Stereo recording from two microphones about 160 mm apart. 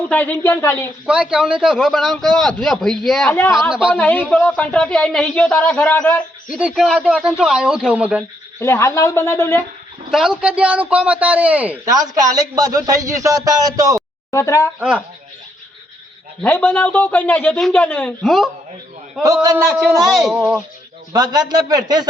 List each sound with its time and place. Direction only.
0.1 s speech: 10° left (ahead or behind)
1.0 s a man's voice: 5° right (ahead or behind); by 6.2 s 10° left (ahead or behind)
6.5 s a man's voice: 5° right (ahead or behind)
8.6 s speech: 15° left (ahead or behind)
10.1 s a man's voice: 5° right (ahead or behind)
11.9 s a man's voice: 25° right (ahead or behind)
14.3 s speech: 20° left (ahead or behind)
14.8 s a man's voice: 10° right (ahead or behind)
16.4 s speech: 10° left (ahead or behind)
18.2 s a man's voice: centre (ahead or behind)
19.2 s a man's voice: 25° right (ahead or behind)
19.6 s a man's voice: 5° right (ahead or behind)
21.1 s a man's voice: 25° right (ahead or behind)